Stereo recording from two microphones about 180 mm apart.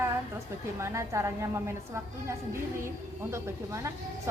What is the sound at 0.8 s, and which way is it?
A woman's voice, 15° right (ahead or behind).